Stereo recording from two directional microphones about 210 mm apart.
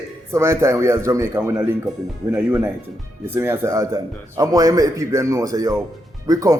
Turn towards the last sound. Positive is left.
turn(degrees=-15)  # may be behind; listen again after turning